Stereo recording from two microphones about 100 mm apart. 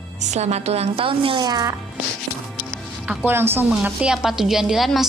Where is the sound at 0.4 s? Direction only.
90° right; by 1.4 s 65° right (ahead or behind).